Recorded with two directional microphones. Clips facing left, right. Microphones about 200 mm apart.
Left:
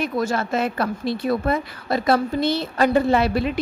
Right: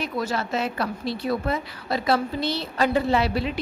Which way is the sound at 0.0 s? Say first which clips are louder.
Left 4 dB; 50° left (ahead or behind).